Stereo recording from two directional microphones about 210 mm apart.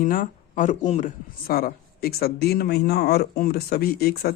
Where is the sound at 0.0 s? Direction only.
40° left (ahead or behind).